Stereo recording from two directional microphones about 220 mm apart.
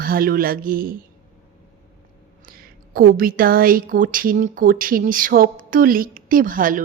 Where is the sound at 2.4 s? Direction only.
40° right (ahead or behind).